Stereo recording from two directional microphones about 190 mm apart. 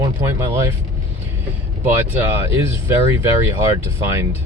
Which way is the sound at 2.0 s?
10° right (ahead or behind).